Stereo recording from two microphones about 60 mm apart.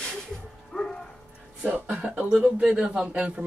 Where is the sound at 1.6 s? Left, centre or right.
Right.